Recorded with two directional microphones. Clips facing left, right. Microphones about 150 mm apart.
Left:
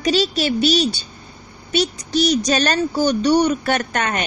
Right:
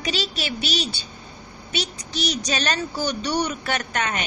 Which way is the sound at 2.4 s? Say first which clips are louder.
Left 7 dB; 45° left (ahead or behind).